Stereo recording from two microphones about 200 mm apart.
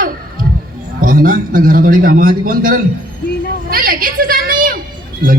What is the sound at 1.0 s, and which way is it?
A man's voice, 45° right (ahead or behind).